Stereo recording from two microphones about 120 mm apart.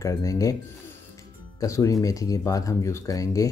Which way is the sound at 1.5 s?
25° left (ahead or behind).